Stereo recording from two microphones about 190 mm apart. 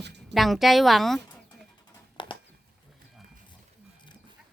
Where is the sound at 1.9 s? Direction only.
25° left (ahead or behind).